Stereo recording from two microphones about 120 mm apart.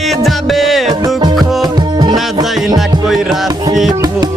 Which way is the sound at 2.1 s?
Centre (ahead or behind).